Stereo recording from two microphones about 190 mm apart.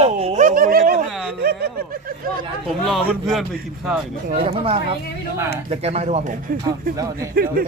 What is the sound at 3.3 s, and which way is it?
Speech, centre (ahead or behind).